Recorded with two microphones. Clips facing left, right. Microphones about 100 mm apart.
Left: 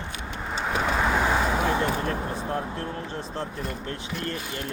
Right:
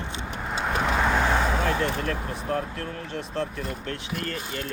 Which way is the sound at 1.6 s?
15° left (ahead or behind).